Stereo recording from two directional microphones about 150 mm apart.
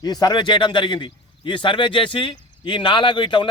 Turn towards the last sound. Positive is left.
turn(degrees=30)  # may be behind; listen again after turning